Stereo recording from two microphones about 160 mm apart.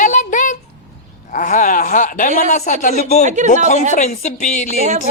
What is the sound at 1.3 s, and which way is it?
Speech, 55° left (ahead or behind).